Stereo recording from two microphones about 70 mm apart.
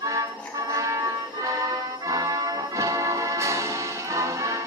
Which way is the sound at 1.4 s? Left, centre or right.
Right.